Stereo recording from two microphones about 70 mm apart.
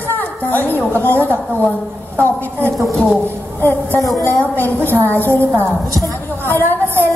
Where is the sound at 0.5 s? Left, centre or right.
Left.